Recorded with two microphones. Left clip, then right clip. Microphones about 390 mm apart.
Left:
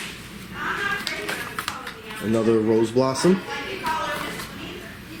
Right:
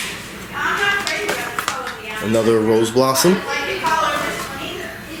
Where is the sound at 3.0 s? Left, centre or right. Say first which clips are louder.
Right 7 dB; centre.